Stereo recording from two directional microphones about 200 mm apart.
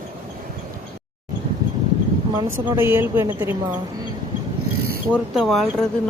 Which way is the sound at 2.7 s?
10° right (ahead or behind).